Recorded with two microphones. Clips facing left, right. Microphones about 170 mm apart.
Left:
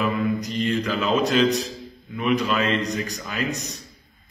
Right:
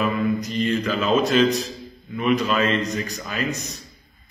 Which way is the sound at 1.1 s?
15° left (ahead or behind).